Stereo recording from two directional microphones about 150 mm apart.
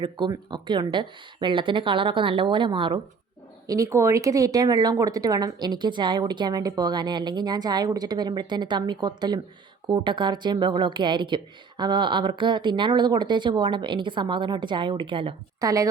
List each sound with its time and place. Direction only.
0.0 s speech: 30° right (ahead or behind)
3.7 s speech: 20° right (ahead or behind); by 15.4 s 35° right (ahead or behind)
15.6 s speech: 20° right (ahead or behind)